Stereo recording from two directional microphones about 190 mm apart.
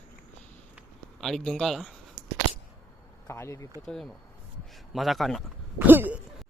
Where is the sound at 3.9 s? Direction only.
5° left (ahead or behind).